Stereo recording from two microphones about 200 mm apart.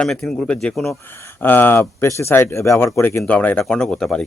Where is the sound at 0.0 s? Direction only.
5° left (ahead or behind).